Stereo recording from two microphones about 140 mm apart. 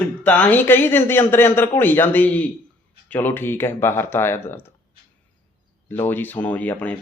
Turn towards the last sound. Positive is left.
turn(degrees=10)  # may be behind; listen again after turning